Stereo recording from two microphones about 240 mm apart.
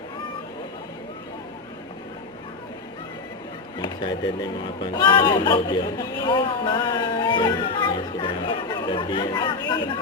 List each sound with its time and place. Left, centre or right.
3.8 s speech: centre